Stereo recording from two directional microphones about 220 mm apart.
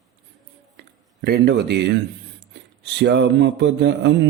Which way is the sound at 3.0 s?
50° right (ahead or behind).